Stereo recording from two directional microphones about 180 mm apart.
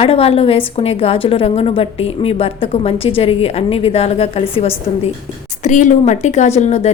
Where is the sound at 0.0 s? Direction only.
35° left (ahead or behind).